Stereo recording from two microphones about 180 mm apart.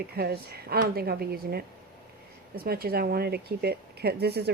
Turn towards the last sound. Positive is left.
turn(degrees=-60)  # may be behind; listen again after turning